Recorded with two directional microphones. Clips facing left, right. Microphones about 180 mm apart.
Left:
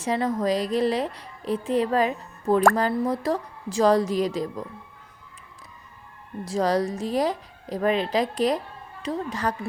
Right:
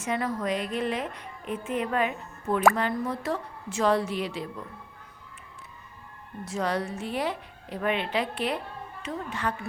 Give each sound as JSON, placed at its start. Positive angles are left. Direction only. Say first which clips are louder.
{"t": 0.0, "sound": "speech", "louder": "left 5 dB", "side_deg": 30}
{"t": 6.4, "sound": "speech", "louder": "left 6 dB", "side_deg": 35}